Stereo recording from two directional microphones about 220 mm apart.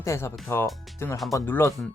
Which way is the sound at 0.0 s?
10° left (ahead or behind).